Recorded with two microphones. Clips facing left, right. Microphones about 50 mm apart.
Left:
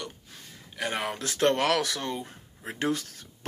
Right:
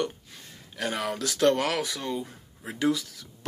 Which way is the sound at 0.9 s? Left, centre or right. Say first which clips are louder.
Right 2 dB; left.